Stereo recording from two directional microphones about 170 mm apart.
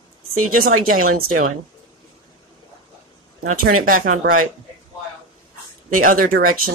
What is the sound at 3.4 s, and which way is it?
Speech, 50° right (ahead or behind).